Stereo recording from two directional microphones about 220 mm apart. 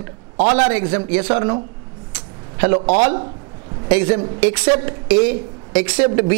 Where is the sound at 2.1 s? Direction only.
10° right (ahead or behind).